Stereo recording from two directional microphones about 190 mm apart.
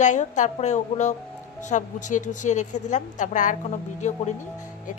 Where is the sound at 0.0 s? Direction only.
40° left (ahead or behind).